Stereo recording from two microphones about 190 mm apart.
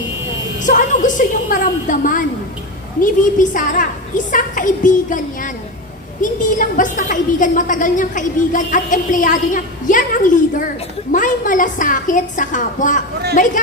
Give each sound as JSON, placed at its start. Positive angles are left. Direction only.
{"t": 0.6, "sound": "a woman's voice", "side_deg": 40}